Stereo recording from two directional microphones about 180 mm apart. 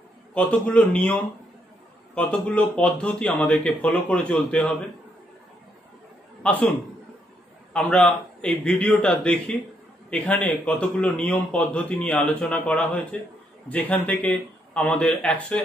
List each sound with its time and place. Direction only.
0.3 s a man's voice: 5° left (ahead or behind)
2.1 s a man's voice: 5° left (ahead or behind)
6.4 s a man's voice: 5° left (ahead or behind)
7.7 s a man's voice: 5° left (ahead or behind)